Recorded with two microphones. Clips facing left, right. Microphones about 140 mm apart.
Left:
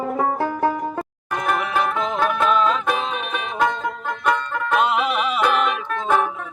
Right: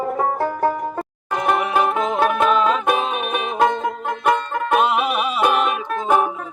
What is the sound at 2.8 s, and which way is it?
Music, 15° right (ahead or behind).